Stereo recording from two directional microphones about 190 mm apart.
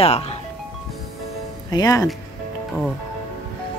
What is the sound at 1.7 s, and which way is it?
Speech, 20° left (ahead or behind).